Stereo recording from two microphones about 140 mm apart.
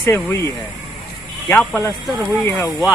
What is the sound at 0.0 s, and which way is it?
Speech, 20° left (ahead or behind).